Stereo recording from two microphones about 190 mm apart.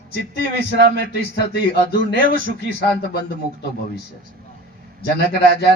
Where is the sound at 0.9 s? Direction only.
60° left (ahead or behind).